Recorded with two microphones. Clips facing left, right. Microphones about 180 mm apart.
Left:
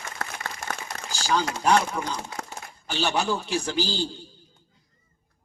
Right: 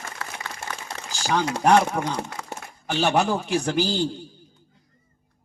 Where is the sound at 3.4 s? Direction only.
35° left (ahead or behind).